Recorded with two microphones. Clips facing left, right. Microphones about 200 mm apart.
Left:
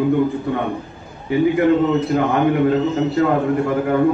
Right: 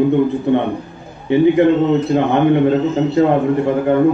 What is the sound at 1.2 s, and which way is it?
A man's voice, 25° right (ahead or behind).